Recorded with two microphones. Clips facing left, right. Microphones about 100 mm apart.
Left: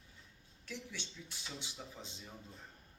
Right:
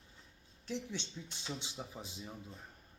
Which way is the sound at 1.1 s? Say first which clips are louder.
Right 5 dB; 35° right (ahead or behind).